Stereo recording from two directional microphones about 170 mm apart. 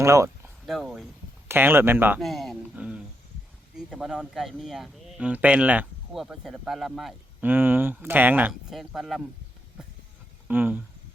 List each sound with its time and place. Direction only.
0.0 s a sound: 15° right (ahead or behind)
0.7 s speech: centre (ahead or behind)
2.2 s a man's voice: centre (ahead or behind)
7.5 s a man's voice: 10° right (ahead or behind)
10.5 s speech: 10° right (ahead or behind)